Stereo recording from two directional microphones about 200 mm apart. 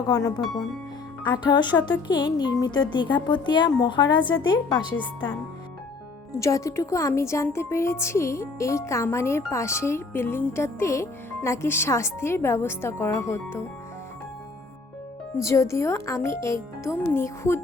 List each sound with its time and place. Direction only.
0.1 s speech: 15° left (ahead or behind)
6.4 s speech: 15° left (ahead or behind)
15.4 s speech: 15° left (ahead or behind)